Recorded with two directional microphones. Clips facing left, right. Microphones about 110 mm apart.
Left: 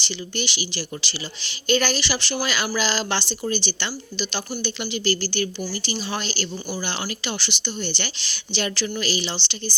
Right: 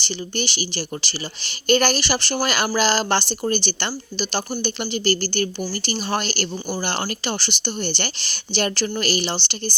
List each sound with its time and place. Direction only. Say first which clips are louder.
0.0 s a woman's voice: right 3 dB; 45° right (ahead or behind)